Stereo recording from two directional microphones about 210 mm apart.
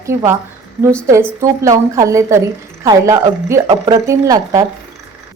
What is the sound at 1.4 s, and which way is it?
A woman's voice, 15° right (ahead or behind).